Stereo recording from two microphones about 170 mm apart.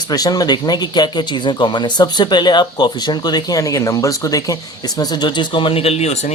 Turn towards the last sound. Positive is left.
turn(degrees=40)  # may be behind; listen again after turning